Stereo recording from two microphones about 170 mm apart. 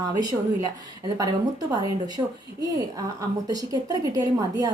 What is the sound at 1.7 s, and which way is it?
Speech, 25° right (ahead or behind).